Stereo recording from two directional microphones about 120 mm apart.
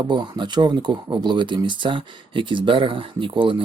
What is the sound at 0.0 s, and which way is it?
Speech, 35° right (ahead or behind).